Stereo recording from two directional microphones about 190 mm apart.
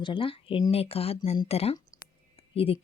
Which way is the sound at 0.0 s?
25° left (ahead or behind).